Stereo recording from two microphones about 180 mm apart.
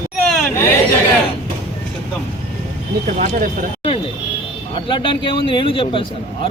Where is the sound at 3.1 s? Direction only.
45° right (ahead or behind).